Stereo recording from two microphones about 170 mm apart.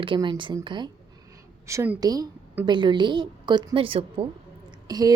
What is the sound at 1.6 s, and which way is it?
A woman's voice, 15° right (ahead or behind).